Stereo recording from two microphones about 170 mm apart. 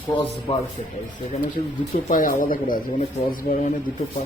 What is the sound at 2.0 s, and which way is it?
Speech, 55° left (ahead or behind).